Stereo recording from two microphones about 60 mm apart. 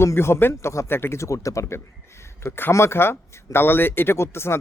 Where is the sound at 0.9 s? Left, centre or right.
Left.